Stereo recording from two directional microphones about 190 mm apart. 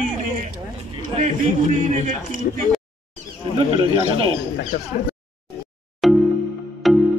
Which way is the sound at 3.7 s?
25° right (ahead or behind).